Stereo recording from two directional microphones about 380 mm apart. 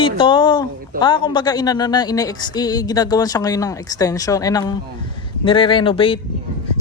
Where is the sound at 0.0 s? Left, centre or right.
Centre.